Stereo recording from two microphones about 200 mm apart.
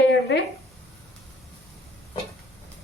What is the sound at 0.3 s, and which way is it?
Speech, 60° left (ahead or behind).